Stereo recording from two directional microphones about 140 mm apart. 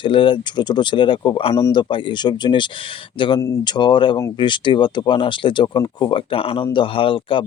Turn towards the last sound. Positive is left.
turn(degrees=40)  # may be behind; listen again after turning